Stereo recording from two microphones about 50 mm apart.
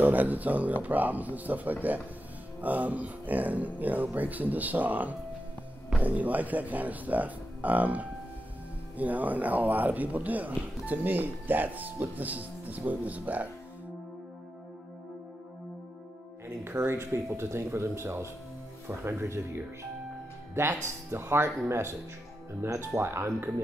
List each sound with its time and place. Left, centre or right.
0.0 s speech: right
16.6 s speech: right